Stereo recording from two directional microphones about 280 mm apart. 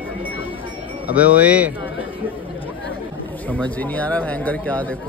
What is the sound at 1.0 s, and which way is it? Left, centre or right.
Speech, centre.